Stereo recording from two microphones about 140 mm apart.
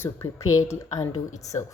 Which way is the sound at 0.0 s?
20° left (ahead or behind).